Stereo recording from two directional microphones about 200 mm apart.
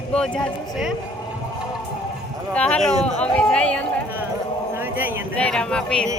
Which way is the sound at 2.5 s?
5° left (ahead or behind).